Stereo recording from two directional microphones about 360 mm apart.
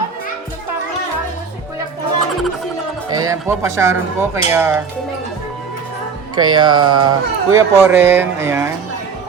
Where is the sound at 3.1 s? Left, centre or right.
Centre.